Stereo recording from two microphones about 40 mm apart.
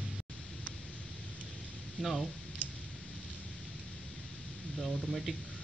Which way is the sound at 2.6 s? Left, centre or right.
Right.